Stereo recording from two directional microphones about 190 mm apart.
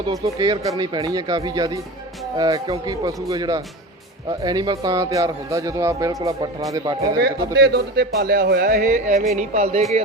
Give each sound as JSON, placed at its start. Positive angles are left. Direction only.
{"t": 0.1, "sound": "a man's voice", "side_deg": -20}
{"t": 7.2, "sound": "speech", "side_deg": -60}
{"t": 9.3, "sound": "music", "side_deg": -35}